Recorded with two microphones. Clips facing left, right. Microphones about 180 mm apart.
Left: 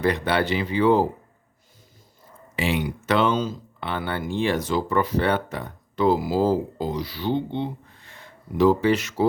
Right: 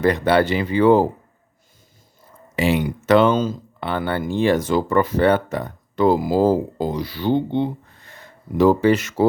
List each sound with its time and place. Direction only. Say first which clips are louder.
0.0 s speech: right 5 dB; 45° right (ahead or behind)
2.6 s speech: right 5 dB; 45° right (ahead or behind)